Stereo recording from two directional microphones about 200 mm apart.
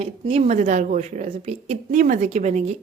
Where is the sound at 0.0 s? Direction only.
30° right (ahead or behind).